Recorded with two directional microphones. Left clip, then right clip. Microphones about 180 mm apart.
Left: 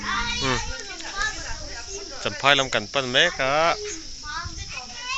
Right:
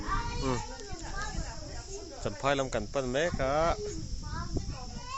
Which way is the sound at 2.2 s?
5° right (ahead or behind).